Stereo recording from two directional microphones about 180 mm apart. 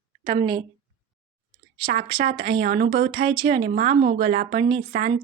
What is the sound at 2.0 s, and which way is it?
Speech, 25° right (ahead or behind).